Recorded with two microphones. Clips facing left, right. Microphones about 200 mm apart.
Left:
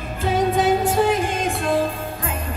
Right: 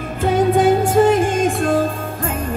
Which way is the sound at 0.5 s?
50° right (ahead or behind).